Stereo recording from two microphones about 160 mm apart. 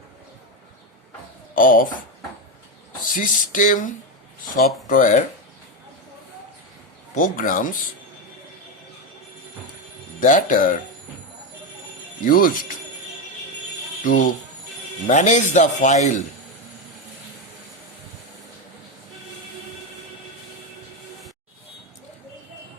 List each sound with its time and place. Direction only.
1.5 s speech: 60° left (ahead or behind)
3.0 s speech: 60° left (ahead or behind)
7.2 s speech: 60° left (ahead or behind)
10.2 s speech: 55° left (ahead or behind)
12.2 s speech: 60° left (ahead or behind)
14.0 s a man's voice: 60° left (ahead or behind)